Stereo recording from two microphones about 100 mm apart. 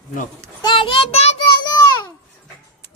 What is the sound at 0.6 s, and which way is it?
Child singing, 55° left (ahead or behind).